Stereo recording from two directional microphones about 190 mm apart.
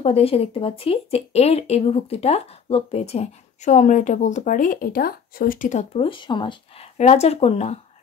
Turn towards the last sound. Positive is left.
turn(degrees=35)  # may be behind; listen again after turning